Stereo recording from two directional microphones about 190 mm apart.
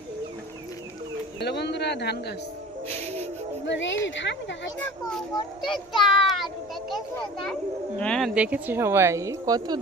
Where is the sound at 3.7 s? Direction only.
75° left (ahead or behind).